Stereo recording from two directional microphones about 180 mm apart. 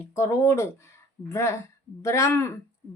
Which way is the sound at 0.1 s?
15° left (ahead or behind).